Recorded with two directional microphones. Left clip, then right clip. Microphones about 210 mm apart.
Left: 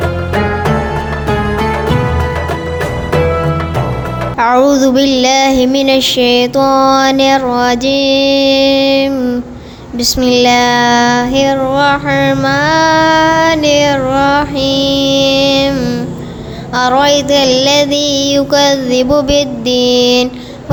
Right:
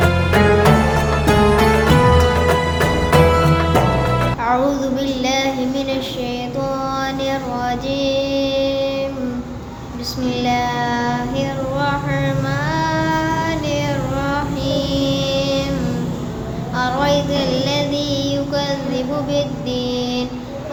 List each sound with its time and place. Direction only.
0.3 s music: centre (ahead or behind)
3.1 s music: centre (ahead or behind)
4.4 s child singing: 45° left (ahead or behind)
10.2 s child singing: 45° left (ahead or behind)
16.7 s child singing: 45° left (ahead or behind)